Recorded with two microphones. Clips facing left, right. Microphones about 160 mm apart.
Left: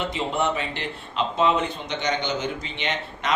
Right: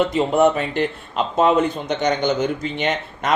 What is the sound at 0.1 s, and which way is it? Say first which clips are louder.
A man's voice: right 9 dB; 45° right (ahead or behind).